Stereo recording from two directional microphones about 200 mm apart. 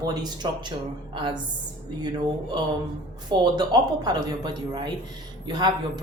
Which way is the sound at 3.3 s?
20° right (ahead or behind).